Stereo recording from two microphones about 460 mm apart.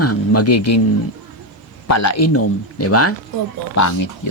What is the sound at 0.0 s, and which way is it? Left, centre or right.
Speech, left.